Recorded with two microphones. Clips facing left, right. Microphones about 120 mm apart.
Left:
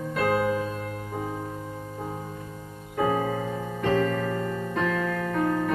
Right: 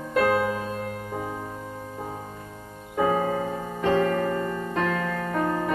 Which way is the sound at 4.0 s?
50° right (ahead or behind).